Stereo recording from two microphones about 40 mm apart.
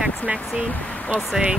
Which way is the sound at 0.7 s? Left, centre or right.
Left.